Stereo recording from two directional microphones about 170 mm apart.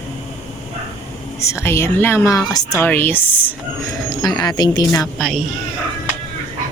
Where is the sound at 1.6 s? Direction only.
15° left (ahead or behind).